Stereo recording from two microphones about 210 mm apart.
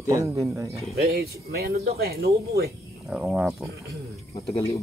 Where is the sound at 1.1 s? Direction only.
45° right (ahead or behind).